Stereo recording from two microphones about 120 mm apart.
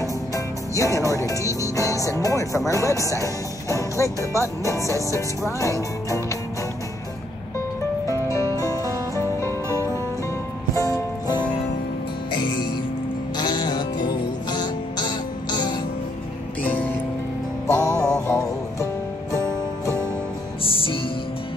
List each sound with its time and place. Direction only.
0.7 s speech: 25° left (ahead or behind)
8.3 s music: 25° left (ahead or behind)
12.3 s music: 40° left (ahead or behind)
17.6 s music: 25° left (ahead or behind)
20.6 s music: 45° left (ahead or behind)